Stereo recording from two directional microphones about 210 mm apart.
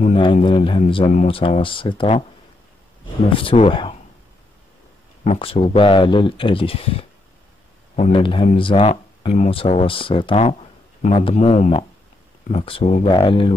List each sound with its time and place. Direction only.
0.0 s speech: 25° left (ahead or behind)
3.3 s speech: 25° left (ahead or behind)
5.2 s speech: 30° left (ahead or behind)